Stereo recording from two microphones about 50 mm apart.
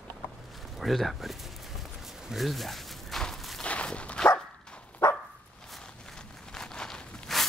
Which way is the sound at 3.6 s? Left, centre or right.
Left.